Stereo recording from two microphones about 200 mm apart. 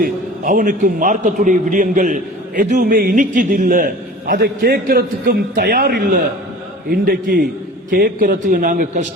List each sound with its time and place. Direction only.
0.0 s a man's voice: 40° right (ahead or behind)